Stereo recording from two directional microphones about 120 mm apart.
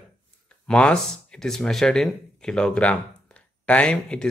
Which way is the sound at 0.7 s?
10° left (ahead or behind).